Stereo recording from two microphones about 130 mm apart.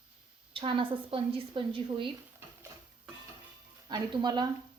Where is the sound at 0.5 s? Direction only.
40° right (ahead or behind).